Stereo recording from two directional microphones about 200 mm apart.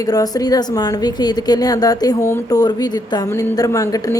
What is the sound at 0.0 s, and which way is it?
A woman's voice, 20° left (ahead or behind).